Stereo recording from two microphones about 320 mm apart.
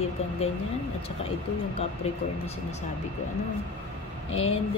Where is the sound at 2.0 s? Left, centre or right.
Centre.